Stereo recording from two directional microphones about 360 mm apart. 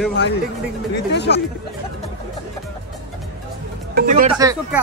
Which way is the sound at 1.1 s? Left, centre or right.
Left.